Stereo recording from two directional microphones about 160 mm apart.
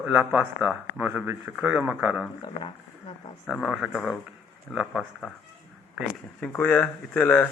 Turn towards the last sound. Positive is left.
turn(degrees=10)  # may be behind; listen again after turning